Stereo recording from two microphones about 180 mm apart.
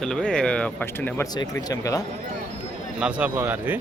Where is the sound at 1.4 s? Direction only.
20° left (ahead or behind).